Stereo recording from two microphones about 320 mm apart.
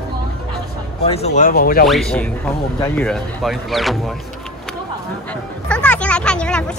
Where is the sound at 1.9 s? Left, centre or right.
Centre.